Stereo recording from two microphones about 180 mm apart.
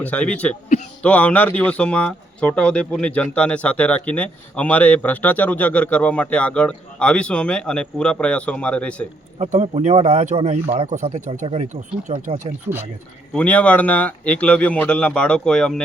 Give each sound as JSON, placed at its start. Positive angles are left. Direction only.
{"t": 0.0, "sound": "speech", "side_deg": 10}
{"t": 9.4, "sound": "a man's voice", "side_deg": -35}
{"t": 13.3, "sound": "speech", "side_deg": 10}